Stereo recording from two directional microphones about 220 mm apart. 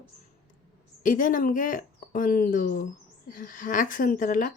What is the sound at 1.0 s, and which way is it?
A woman's voice, 35° left (ahead or behind).